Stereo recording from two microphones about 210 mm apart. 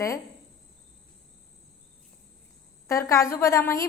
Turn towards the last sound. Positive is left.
turn(degrees=10)  # may be behind; listen again after turning